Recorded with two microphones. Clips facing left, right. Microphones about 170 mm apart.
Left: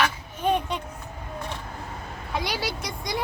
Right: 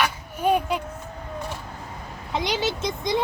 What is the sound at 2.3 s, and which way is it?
Speech, 20° right (ahead or behind).